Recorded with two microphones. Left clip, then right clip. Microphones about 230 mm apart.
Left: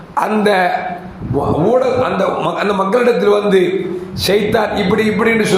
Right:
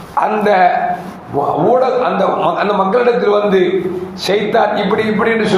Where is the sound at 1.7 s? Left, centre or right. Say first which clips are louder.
Right 1 dB; left.